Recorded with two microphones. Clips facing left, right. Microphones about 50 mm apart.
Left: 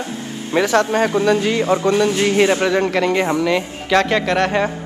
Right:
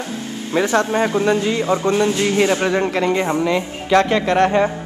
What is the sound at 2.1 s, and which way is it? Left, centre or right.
Speech, left.